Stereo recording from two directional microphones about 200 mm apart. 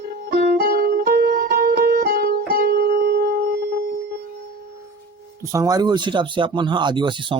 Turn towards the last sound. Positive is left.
turn(degrees=-25)  # may be behind; listen again after turning